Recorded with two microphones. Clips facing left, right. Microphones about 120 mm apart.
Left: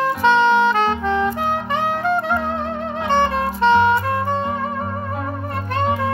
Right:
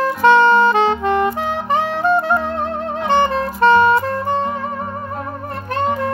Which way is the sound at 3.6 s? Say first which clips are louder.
Right 3 dB; 45° right (ahead or behind).